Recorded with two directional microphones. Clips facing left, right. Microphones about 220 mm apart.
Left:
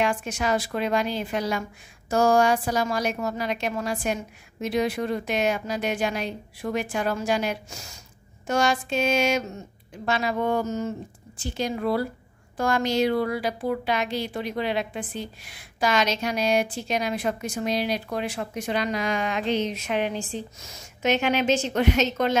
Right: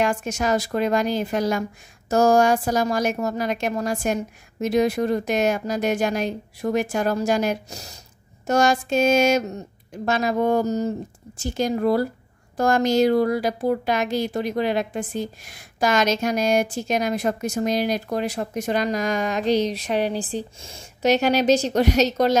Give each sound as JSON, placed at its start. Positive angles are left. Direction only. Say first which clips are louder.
{"t": 0.0, "sound": "a woman's voice", "louder": "right 3 dB", "side_deg": -45}